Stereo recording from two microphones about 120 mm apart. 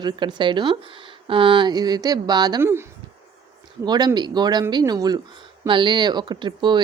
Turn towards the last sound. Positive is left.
turn(degrees=-40)  # may be behind; listen again after turning